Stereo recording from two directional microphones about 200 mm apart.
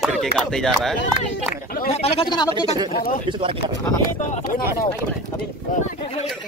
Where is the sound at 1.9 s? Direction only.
30° left (ahead or behind).